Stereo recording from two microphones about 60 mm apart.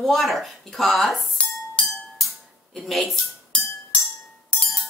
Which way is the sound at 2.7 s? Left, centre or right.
Centre.